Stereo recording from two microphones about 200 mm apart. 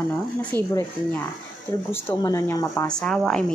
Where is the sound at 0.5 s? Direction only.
20° right (ahead or behind).